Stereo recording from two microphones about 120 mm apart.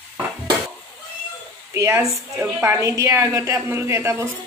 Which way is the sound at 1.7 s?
25° right (ahead or behind).